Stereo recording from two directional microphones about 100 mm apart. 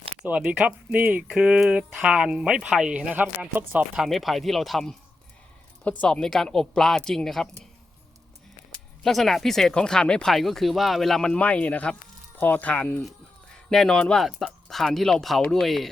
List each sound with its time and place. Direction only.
0.2 s speech: 10° right (ahead or behind)
3.9 s speech: 5° right (ahead or behind)
5.8 s speech: 15° left (ahead or behind)
9.0 s speech: centre (ahead or behind)